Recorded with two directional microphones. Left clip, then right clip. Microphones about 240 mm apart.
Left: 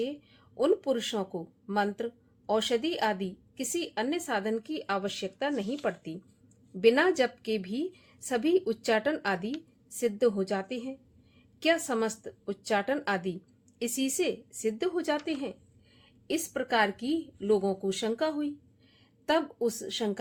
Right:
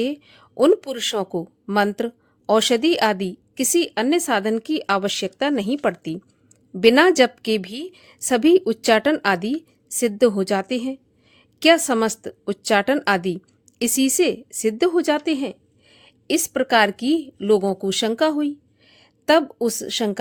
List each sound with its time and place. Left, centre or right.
0.0 s a woman's voice: right